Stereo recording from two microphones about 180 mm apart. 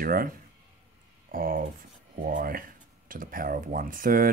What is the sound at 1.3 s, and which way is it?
Speech, 55° right (ahead or behind).